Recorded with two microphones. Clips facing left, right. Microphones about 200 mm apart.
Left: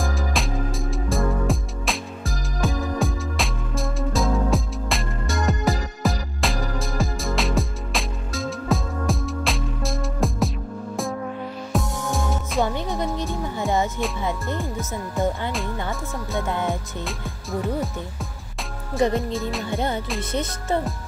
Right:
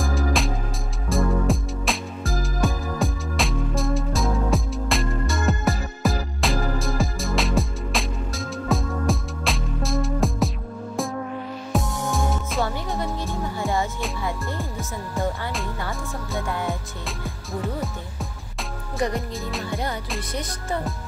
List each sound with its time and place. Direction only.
0.0 s music: centre (ahead or behind)
11.7 s music: centre (ahead or behind)
12.6 s music: 15° left (ahead or behind)
14.6 s music: centre (ahead or behind)
16.3 s music: 20° left (ahead or behind)
17.0 s music: centre (ahead or behind)
19.1 s music: centre (ahead or behind)
20.2 s music: 25° left (ahead or behind)